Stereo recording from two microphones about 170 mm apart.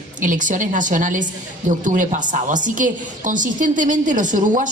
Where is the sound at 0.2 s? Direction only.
50° right (ahead or behind).